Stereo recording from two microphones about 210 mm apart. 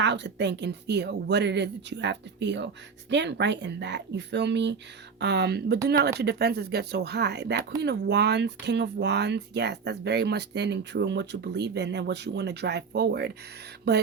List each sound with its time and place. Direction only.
0.0 s speech: 55° right (ahead or behind)